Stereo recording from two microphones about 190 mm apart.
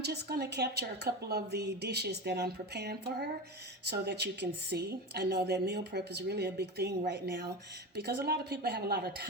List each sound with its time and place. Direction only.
0.0 s a woman's voice: 60° right (ahead or behind)